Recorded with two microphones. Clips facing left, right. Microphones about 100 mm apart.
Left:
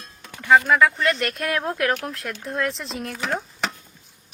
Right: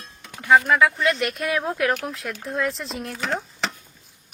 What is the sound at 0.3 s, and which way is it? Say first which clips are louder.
Music: even; 10° right (ahead or behind).